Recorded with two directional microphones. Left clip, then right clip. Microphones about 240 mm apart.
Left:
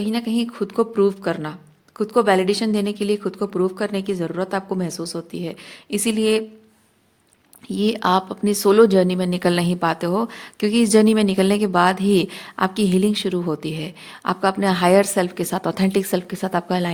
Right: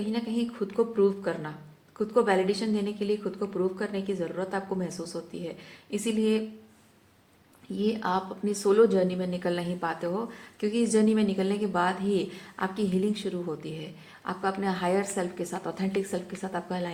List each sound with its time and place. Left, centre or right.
0.0 s a woman's voice: left
7.8 s a woman's voice: left